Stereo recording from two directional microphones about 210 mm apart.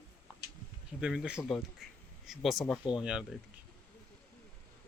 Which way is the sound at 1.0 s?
5° right (ahead or behind).